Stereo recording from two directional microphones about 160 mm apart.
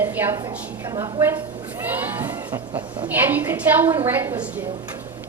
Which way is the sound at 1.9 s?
10° right (ahead or behind).